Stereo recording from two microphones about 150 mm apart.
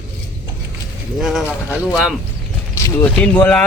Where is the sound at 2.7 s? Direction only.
20° left (ahead or behind).